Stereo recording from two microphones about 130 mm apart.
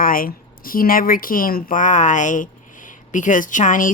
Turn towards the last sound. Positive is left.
turn(degrees=85)